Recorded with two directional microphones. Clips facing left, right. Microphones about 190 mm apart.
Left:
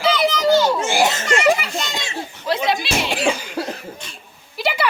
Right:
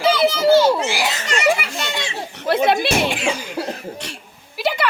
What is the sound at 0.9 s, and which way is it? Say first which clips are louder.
Giggle: left 5 dB; 50° left (ahead or behind).